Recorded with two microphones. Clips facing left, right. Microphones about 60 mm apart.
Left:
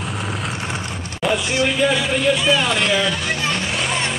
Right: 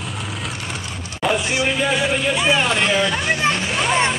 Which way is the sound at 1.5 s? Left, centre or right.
Centre.